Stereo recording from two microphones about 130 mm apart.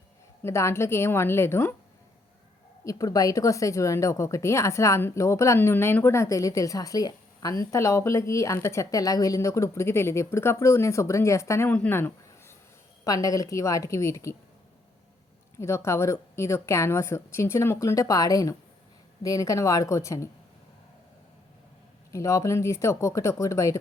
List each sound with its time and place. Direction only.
0.4 s a woman's voice: 20° left (ahead or behind)
2.8 s a woman's voice: 25° left (ahead or behind)
15.5 s a woman's voice: 20° left (ahead or behind)
22.1 s a woman's voice: 25° left (ahead or behind)